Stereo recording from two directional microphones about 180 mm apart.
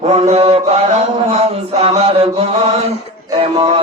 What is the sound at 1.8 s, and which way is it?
Mantra, 35° right (ahead or behind).